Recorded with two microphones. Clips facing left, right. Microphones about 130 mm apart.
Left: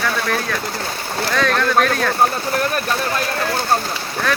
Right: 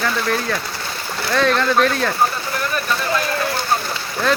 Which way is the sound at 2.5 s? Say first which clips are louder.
Left 3 dB; 45° left (ahead or behind).